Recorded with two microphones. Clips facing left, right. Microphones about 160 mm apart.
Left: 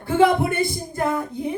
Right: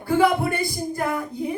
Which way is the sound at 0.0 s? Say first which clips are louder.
Left 2 dB; 20° left (ahead or behind).